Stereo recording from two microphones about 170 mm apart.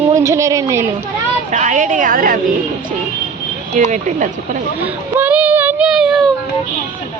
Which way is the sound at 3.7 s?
45° right (ahead or behind).